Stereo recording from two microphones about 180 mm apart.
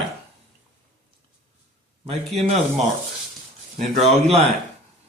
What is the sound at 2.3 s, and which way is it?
Speech, 35° right (ahead or behind).